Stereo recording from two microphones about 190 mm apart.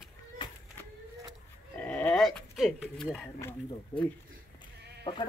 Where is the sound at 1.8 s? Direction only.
10° left (ahead or behind).